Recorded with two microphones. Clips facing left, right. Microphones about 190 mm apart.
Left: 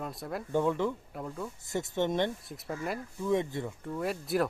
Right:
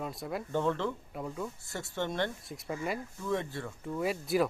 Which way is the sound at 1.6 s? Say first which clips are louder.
Left 9 dB; 20° left (ahead or behind).